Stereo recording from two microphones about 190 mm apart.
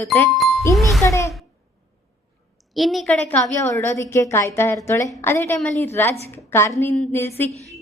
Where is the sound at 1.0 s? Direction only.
15° left (ahead or behind).